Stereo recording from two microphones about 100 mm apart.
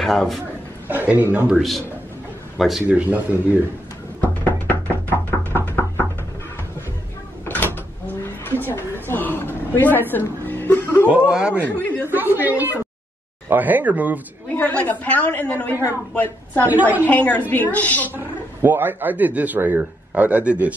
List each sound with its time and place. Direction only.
0.0 s a man's voice: centre (ahead or behind)
0.8 s a man's voice: 15° right (ahead or behind)
2.5 s speech: centre (ahead or behind)
2.8 s speech: 15° right (ahead or behind)
4.2 s music: 15° left (ahead or behind)
5.5 s a sound: 20° left (ahead or behind)
7.4 s cupboard open or close: 20° left (ahead or behind)
11.1 s speech: 10° right (ahead or behind)
11.6 s speech: 20° left (ahead or behind)
12.1 s speech: 20° right (ahead or behind)
14.5 s a woman's voice: 15° left (ahead or behind)
17.0 s a woman's voice: 15° left (ahead or behind)
18.1 s a man's voice: 20° right (ahead or behind)